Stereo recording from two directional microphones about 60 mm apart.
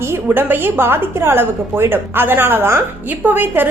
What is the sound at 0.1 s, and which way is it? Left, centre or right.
A woman's voice, right.